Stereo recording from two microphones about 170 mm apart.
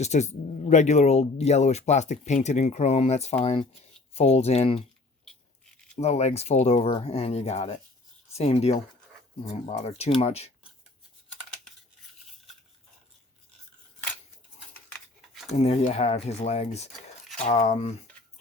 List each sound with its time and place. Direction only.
0.0 s speech: 40° left (ahead or behind)
6.0 s speech: 40° left (ahead or behind)
15.5 s speech: 40° left (ahead or behind)